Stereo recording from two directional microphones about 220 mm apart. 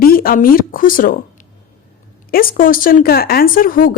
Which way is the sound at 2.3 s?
40° left (ahead or behind).